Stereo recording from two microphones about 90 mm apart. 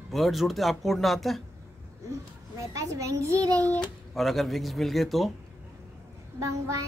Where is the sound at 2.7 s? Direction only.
35° right (ahead or behind).